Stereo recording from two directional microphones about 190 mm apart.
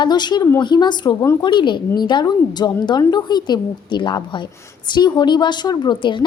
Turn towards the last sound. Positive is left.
turn(degrees=25)  # may be behind; listen again after turning